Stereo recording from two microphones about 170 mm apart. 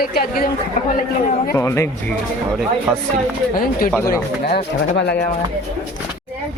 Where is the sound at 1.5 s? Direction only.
15° left (ahead or behind).